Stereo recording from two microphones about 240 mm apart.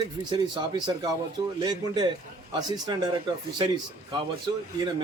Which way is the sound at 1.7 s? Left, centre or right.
Centre.